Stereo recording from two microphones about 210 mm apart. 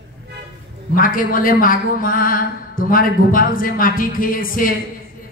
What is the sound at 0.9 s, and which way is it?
A woman's voice, 40° left (ahead or behind).